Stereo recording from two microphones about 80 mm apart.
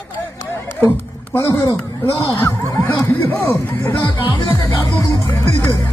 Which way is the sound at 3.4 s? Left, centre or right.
Left.